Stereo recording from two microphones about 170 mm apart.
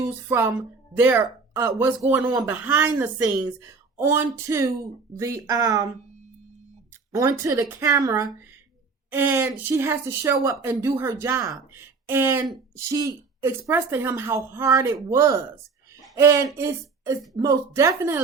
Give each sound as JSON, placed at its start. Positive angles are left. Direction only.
{"t": 0.0, "sound": "speech", "side_deg": -15}
{"t": 7.1, "sound": "speech", "side_deg": -20}